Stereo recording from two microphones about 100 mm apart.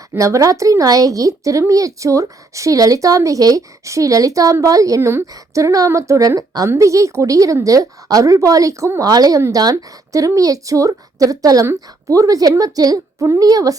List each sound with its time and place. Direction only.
0.1 s speech: 30° right (ahead or behind)